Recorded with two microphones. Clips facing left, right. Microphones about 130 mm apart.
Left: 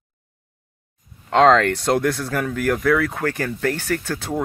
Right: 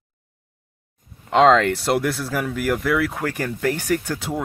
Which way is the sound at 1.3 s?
10° right (ahead or behind).